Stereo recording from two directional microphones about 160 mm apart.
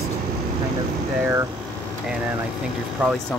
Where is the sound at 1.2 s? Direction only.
15° right (ahead or behind).